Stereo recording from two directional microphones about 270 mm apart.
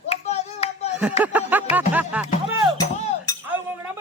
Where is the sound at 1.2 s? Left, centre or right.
Centre.